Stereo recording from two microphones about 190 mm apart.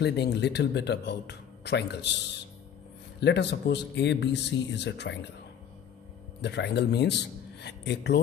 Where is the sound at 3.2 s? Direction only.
65° left (ahead or behind).